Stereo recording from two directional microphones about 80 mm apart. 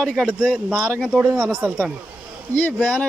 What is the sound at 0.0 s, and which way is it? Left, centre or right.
Speech, centre.